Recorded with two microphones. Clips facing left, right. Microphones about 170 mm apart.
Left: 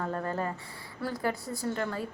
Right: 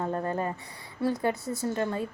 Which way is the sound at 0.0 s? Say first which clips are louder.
Right 3 dB; 20° right (ahead or behind).